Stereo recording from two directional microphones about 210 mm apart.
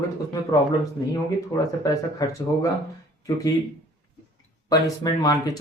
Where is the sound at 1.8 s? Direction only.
20° left (ahead or behind).